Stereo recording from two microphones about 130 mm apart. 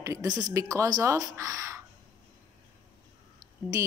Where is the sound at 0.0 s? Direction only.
25° right (ahead or behind).